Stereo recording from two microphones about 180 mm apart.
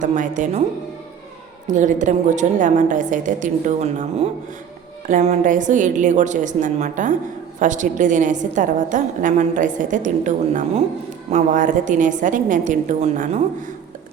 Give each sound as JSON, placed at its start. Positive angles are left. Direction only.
{"t": 0.0, "sound": "a woman's voice", "side_deg": -45}
{"t": 1.7, "sound": "a woman's voice", "side_deg": -45}